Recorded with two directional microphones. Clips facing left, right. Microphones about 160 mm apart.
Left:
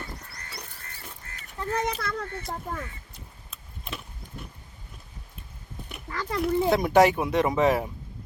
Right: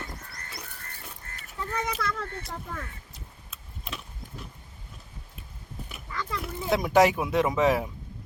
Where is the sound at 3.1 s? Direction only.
Centre (ahead or behind).